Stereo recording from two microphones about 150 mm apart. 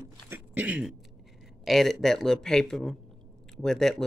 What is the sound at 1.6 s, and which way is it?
Speech, centre (ahead or behind).